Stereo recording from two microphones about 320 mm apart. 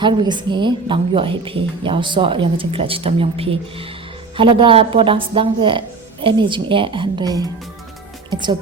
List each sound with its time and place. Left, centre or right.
0.0 s a woman's voice: centre